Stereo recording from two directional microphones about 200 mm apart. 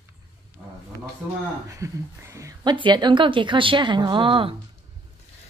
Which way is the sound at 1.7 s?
15° right (ahead or behind).